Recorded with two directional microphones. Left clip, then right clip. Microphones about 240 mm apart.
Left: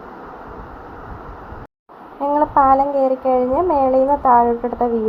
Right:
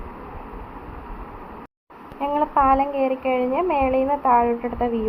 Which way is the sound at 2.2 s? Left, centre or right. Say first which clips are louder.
Left 5 dB; centre.